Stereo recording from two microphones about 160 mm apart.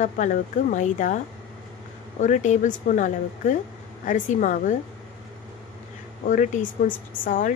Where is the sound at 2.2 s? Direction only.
50° left (ahead or behind).